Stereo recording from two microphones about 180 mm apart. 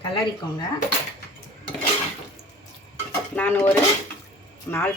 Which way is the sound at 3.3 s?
10° left (ahead or behind).